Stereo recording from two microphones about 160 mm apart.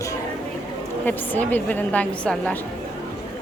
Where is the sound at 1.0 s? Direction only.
10° left (ahead or behind).